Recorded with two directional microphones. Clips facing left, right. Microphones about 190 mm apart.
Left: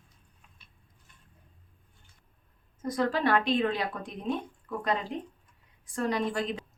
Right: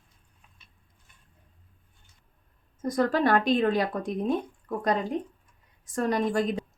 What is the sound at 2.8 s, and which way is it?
Speech, 45° right (ahead or behind).